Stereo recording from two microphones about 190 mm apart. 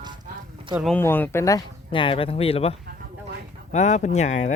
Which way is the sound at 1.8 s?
30° left (ahead or behind).